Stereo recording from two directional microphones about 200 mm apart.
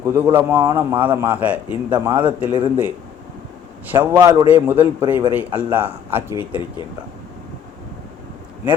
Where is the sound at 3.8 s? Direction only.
10° right (ahead or behind).